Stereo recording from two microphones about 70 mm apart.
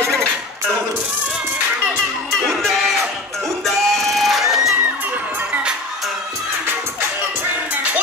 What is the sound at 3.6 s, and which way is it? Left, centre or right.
Music, centre.